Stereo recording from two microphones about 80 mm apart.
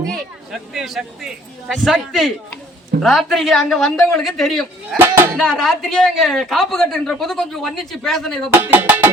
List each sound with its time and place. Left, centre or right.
0.1 s speech: centre
4.9 s speech: right
5.4 s speech: centre
8.7 s music: right